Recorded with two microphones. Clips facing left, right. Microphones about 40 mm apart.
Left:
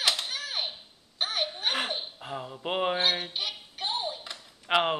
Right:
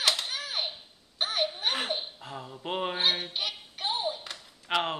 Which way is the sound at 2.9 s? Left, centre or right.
Centre.